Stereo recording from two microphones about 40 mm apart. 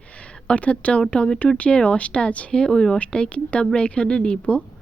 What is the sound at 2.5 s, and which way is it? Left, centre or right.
Speech, centre.